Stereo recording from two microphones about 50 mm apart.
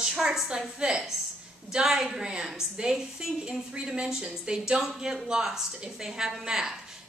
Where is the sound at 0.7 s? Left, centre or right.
Centre.